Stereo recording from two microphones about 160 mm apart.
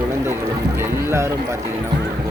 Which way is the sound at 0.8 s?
15° right (ahead or behind).